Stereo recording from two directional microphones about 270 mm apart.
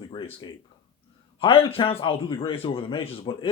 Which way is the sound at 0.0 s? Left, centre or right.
Centre.